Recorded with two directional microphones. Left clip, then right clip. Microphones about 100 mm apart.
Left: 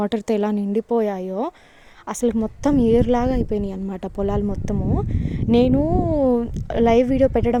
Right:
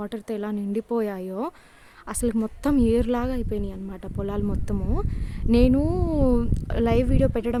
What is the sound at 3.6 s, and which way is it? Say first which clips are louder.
Speech: left 7 dB; 85° left.